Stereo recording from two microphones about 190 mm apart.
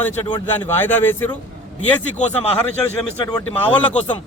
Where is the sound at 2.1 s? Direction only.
35° left (ahead or behind).